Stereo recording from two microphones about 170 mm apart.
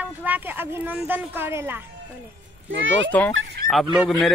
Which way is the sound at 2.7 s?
90° right.